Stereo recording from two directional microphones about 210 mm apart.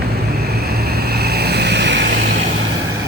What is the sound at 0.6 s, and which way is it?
Vehicle, 50° right (ahead or behind).